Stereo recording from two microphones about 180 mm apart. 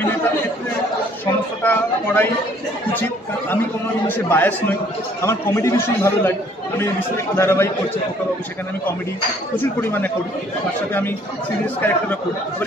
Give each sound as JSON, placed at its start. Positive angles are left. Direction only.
{"t": 1.2, "sound": "a man's voice", "side_deg": 10}
{"t": 7.3, "sound": "a man's voice", "side_deg": 15}
{"t": 9.8, "sound": "a man's voice", "side_deg": 10}
{"t": 11.6, "sound": "a man's voice", "side_deg": 10}